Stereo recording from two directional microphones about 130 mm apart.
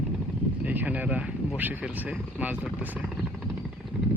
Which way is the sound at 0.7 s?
10° right (ahead or behind).